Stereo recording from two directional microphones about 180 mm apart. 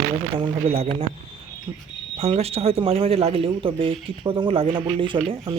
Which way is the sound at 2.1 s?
35° right (ahead or behind).